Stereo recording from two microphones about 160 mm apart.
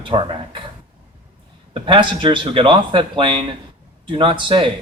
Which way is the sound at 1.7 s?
30° right (ahead or behind).